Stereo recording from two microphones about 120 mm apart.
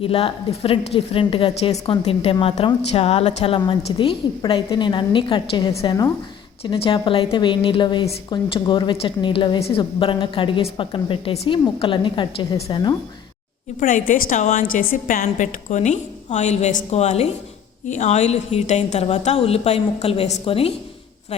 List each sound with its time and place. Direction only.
0.0 s a woman's voice: 50° left (ahead or behind)
13.7 s a woman's voice: 90° left; by 17.2 s 65° left (ahead or behind)
17.8 s a woman's voice: 80° left; by 20.7 s 50° left (ahead or behind)